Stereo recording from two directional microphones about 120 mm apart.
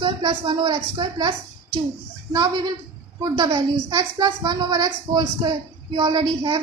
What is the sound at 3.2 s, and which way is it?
A child's voice, 35° right (ahead or behind).